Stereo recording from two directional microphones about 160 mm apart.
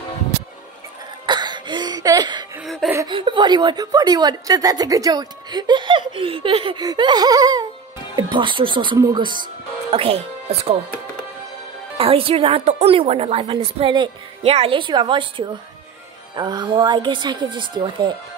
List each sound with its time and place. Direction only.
1.2 s cough: 30° right (ahead or behind)
2.6 s a sound: centre (ahead or behind)
3.1 s a woman's voice: 30° right (ahead or behind)
12.0 s a woman's voice: 35° right (ahead or behind)